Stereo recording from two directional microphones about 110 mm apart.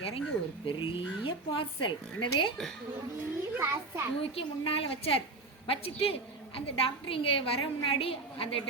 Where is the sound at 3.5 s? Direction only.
20° right (ahead or behind).